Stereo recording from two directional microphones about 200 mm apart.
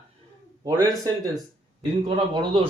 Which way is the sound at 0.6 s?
15° right (ahead or behind).